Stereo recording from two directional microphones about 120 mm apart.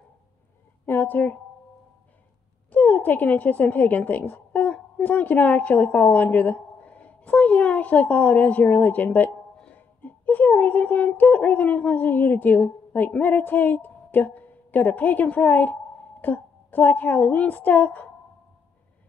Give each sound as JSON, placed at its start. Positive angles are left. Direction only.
{"t": 0.8, "sound": "speech", "side_deg": 15}
{"t": 2.7, "sound": "a woman's voice", "side_deg": 10}